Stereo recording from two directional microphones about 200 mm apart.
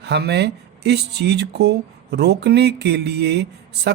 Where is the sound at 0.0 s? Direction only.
55° right (ahead or behind).